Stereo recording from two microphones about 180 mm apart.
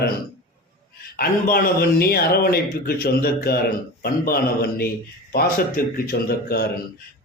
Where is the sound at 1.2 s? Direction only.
55° left (ahead or behind).